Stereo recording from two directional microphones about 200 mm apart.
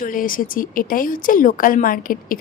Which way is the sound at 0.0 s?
45° left (ahead or behind).